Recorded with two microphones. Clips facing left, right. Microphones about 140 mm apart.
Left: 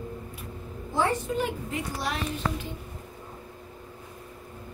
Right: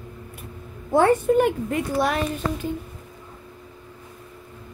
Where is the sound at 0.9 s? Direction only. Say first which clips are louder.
Right 10 dB; 55° right (ahead or behind).